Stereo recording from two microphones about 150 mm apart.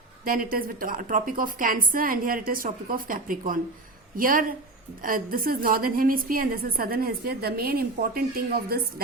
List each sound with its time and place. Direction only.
0.3 s a woman's voice: 70° right (ahead or behind); by 8.8 s 90° right